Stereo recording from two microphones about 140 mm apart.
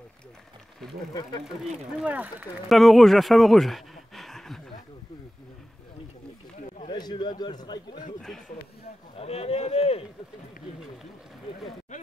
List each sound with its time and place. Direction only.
1.4 s speech: 5° right (ahead or behind)
2.7 s speech: centre (ahead or behind)
6.9 s a man's voice: 30° left (ahead or behind)
9.1 s a man's voice: 45° left (ahead or behind)